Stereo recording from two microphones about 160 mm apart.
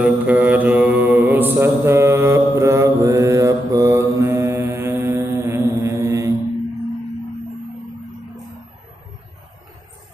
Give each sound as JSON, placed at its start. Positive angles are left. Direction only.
{"t": 0.0, "sound": "mantra", "side_deg": -10}